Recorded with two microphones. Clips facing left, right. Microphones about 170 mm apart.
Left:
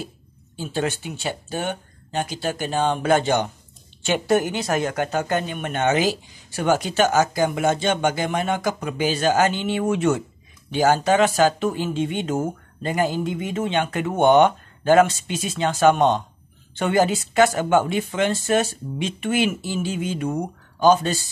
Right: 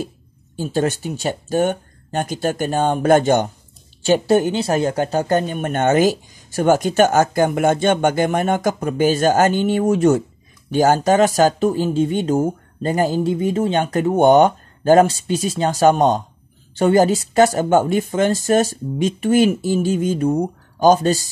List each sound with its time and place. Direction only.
0.6 s speech: 40° right (ahead or behind)
4.0 s speech: 35° right (ahead or behind)